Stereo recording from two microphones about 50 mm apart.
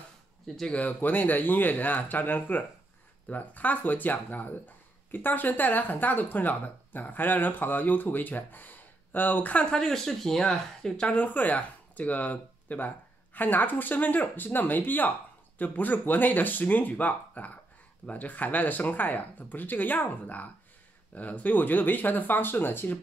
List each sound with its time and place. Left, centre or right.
0.7 s speech: left
9.7 s speech: centre
11.1 s speech: left